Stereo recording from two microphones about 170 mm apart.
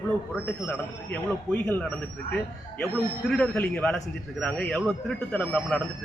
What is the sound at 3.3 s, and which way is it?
A man's voice, 5° left (ahead or behind).